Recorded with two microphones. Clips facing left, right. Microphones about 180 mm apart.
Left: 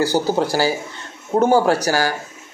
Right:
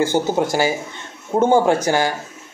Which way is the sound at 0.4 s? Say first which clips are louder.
Even; 20° right (ahead or behind).